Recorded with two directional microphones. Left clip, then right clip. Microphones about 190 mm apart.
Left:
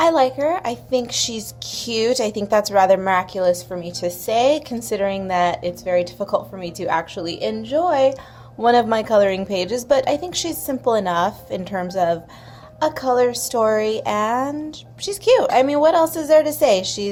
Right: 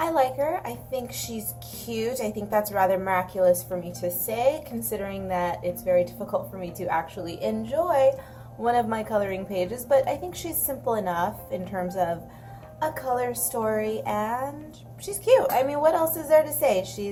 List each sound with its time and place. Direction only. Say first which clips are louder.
0.0 s a woman's voice: left 7 dB; 40° left (ahead or behind)